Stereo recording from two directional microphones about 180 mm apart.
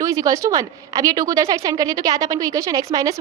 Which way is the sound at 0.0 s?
20° right (ahead or behind).